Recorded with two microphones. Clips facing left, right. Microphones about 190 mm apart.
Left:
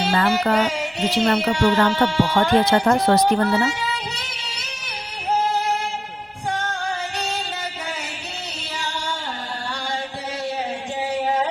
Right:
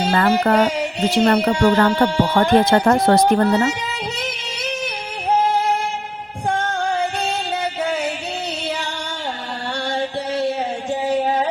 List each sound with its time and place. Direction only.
0.1 s speech: 40° right (ahead or behind)
5.5 s music: 55° right (ahead or behind)
9.8 s music: 65° right (ahead or behind)
11.1 s music: 40° right (ahead or behind)